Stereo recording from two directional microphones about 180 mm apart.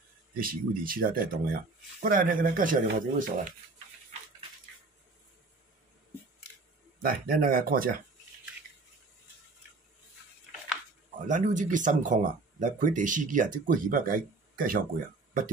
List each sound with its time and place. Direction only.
0.4 s speech: 50° right (ahead or behind)
7.0 s speech: 55° right (ahead or behind)
11.2 s speech: 45° right (ahead or behind)